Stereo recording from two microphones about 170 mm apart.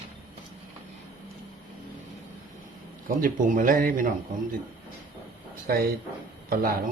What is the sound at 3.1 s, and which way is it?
Speech, 55° right (ahead or behind).